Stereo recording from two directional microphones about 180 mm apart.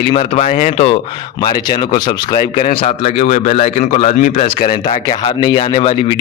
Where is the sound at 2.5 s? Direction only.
35° left (ahead or behind).